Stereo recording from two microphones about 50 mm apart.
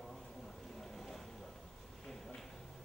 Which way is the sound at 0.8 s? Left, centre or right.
Centre.